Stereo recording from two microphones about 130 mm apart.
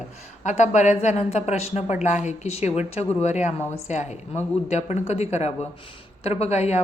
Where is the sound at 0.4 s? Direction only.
65° left (ahead or behind).